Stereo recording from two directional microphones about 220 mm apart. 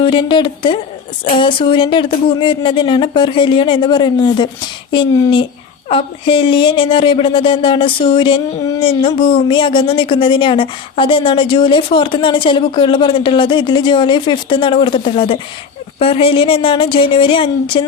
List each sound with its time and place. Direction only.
0.0 s speech: 25° left (ahead or behind)